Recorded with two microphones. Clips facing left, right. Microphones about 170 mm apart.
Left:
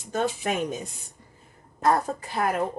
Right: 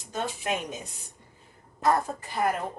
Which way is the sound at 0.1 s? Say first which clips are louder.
Left 4 dB; 50° left (ahead or behind).